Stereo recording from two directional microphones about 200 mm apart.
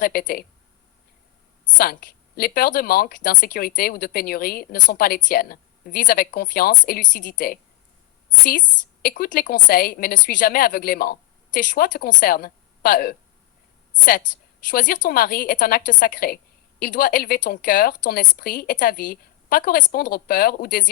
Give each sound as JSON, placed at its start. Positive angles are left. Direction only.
{"t": 0.0, "sound": "speech", "side_deg": 45}
{"t": 1.8, "sound": "speech", "side_deg": 50}
{"t": 9.0, "sound": "speech", "side_deg": 45}